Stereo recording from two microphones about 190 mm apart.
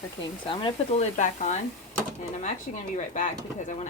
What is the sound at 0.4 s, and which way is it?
Speech, 25° left (ahead or behind).